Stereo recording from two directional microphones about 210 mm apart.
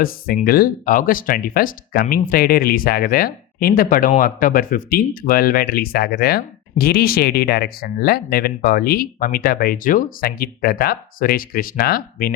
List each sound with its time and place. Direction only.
0.4 s speech: 45° left (ahead or behind)